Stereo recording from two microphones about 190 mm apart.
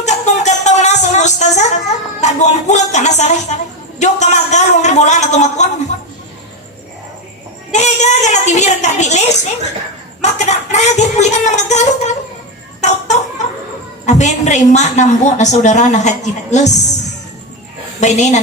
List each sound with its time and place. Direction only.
0.0 s music: 35° left (ahead or behind)
2.2 s speech: 40° left (ahead or behind)
4.0 s a sound: 40° left (ahead or behind)
7.7 s a woman's voice: 40° left (ahead or behind)
14.0 s a woman's voice: 40° left (ahead or behind)
18.0 s a woman's voice: 40° left (ahead or behind)